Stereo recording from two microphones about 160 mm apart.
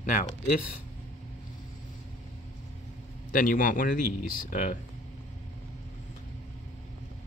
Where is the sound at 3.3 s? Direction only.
60° left (ahead or behind).